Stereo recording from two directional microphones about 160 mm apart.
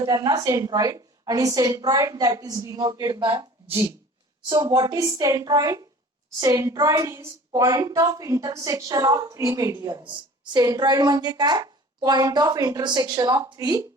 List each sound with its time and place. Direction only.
0.0 s speech: 25° right (ahead or behind)
4.4 s speech: 25° right (ahead or behind)